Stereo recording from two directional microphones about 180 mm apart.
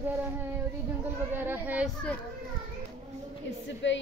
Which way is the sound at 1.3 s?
10° right (ahead or behind).